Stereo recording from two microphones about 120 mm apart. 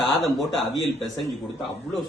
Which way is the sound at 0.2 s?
Centre (ahead or behind).